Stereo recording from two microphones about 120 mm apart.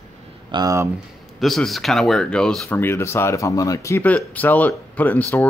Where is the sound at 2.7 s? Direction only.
20° left (ahead or behind).